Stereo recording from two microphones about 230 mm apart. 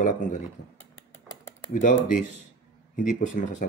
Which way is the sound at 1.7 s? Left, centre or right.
Left.